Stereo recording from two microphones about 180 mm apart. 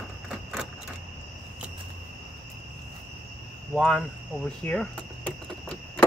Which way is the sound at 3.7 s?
Centre (ahead or behind).